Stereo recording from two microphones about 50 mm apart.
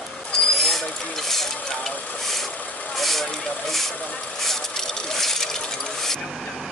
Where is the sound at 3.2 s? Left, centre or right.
Centre.